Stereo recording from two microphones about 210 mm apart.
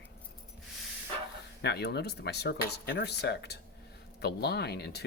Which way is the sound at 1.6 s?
50° left (ahead or behind).